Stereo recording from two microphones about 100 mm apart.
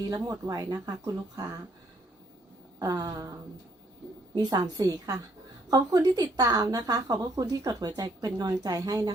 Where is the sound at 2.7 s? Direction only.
40° right (ahead or behind).